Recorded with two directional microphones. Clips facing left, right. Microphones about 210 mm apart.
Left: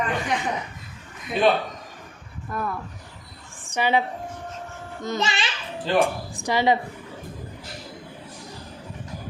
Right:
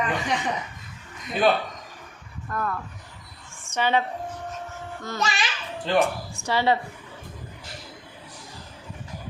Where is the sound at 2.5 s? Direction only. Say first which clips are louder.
Even; 10° left (ahead or behind).